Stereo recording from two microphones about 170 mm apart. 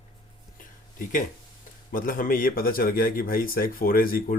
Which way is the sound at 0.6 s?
50° left (ahead or behind).